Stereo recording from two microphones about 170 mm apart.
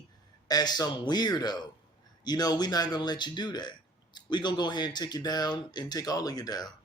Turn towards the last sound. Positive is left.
turn(degrees=25)  # may be behind; listen again after turning